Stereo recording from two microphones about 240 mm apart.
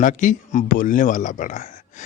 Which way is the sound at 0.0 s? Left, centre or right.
Left.